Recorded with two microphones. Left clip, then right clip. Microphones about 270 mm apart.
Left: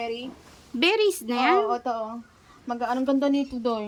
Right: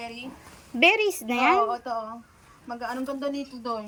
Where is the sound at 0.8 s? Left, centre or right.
Centre.